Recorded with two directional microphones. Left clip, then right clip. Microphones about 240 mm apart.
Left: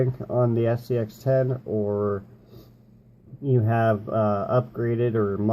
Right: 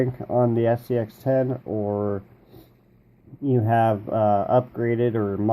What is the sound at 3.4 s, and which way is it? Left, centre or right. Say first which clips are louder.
Speech: right 2 dB; right.